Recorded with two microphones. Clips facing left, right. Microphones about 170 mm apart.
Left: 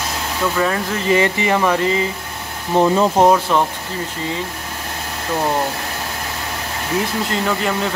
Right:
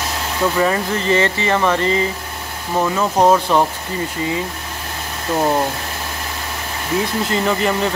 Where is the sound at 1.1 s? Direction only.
10° left (ahead or behind).